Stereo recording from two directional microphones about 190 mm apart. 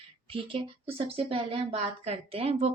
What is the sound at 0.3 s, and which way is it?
A woman's voice, 30° right (ahead or behind).